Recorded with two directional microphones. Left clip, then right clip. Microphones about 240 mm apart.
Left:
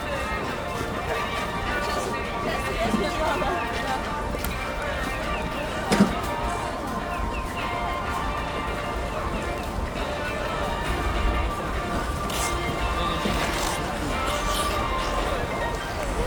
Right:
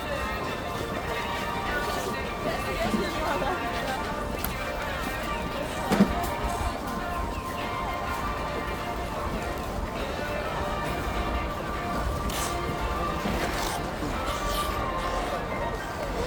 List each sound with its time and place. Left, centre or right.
5.9 s music: right